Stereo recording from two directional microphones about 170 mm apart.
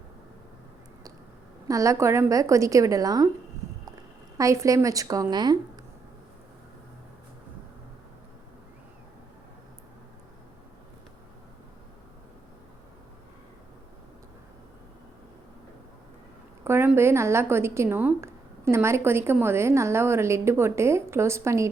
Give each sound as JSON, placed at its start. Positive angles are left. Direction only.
{"t": 1.6, "sound": "a woman's voice", "side_deg": -20}
{"t": 4.4, "sound": "a woman's voice", "side_deg": -20}
{"t": 16.6, "sound": "a woman's voice", "side_deg": -15}